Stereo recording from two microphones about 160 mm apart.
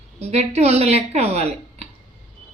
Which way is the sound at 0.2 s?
40° right (ahead or behind).